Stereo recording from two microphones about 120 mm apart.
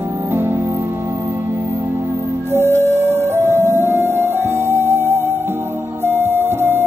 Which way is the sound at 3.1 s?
20° right (ahead or behind).